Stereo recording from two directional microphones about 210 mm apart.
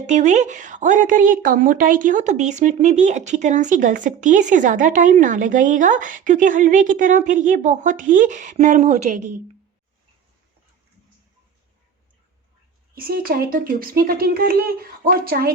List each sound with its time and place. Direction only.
0.1 s a woman's voice: 35° right (ahead or behind)
12.9 s speech: 45° right (ahead or behind)